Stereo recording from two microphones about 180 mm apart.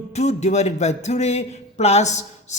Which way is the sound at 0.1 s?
40° left (ahead or behind).